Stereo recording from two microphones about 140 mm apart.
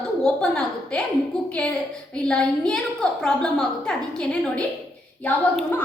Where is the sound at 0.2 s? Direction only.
5° left (ahead or behind).